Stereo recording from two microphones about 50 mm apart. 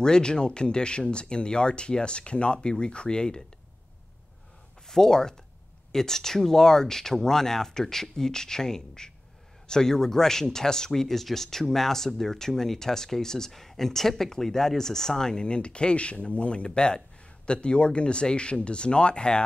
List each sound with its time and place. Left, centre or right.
0.0 s speech: centre
4.8 s speech: centre